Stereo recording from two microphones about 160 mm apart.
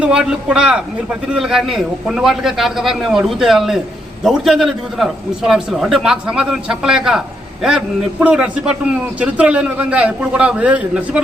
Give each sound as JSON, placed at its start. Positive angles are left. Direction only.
{"t": 0.0, "sound": "a man's voice", "side_deg": -5}